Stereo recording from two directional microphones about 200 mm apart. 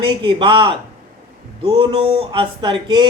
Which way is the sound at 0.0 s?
25° right (ahead or behind).